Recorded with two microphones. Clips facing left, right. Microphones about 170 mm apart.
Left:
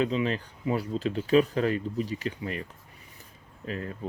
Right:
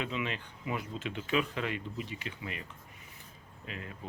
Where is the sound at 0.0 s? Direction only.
35° left (ahead or behind).